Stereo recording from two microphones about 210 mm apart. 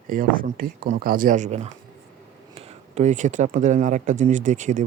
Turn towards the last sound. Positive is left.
turn(degrees=-35)  # may be behind; listen again after turning